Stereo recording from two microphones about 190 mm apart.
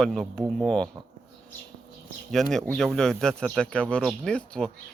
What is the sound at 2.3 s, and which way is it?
Speech, centre (ahead or behind).